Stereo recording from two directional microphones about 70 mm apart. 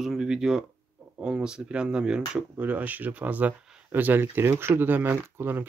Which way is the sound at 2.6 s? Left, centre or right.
Right.